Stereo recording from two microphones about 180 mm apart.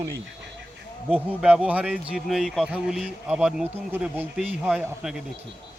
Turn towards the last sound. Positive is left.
turn(degrees=-5)  # may be behind; listen again after turning